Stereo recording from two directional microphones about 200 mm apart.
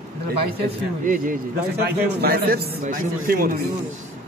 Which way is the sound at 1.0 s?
45° right (ahead or behind).